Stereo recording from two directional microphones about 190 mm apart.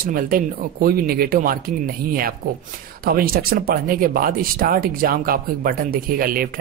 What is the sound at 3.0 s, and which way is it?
Speech, 50° right (ahead or behind).